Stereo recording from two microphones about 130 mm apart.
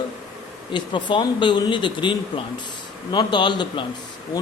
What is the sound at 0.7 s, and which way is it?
Speech, 35° left (ahead or behind).